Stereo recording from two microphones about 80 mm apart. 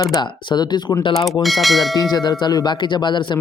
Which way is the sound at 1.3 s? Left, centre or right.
Centre.